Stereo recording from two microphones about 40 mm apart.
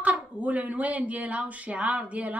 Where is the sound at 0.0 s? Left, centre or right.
Right.